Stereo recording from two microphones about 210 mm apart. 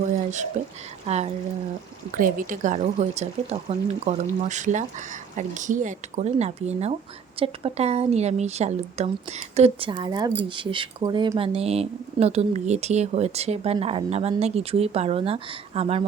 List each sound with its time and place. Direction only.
1.0 s speech: 30° right (ahead or behind)